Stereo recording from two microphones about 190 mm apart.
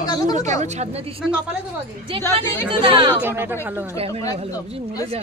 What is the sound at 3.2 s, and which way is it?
Speech, 10° right (ahead or behind).